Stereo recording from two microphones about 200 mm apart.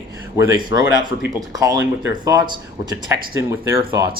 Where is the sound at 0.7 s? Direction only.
15° right (ahead or behind).